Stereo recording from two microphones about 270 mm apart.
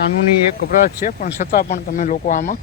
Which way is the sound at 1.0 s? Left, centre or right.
Left.